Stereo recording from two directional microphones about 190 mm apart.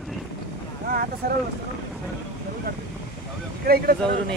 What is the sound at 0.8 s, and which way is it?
Boat, 50° right (ahead or behind).